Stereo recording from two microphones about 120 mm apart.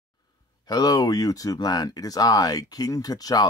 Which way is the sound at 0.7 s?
35° left (ahead or behind).